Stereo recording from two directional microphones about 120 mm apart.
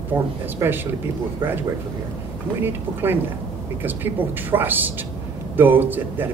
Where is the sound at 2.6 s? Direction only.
15° right (ahead or behind).